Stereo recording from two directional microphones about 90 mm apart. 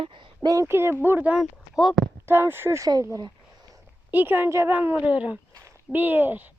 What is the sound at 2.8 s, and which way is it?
Speech, 40° right (ahead or behind).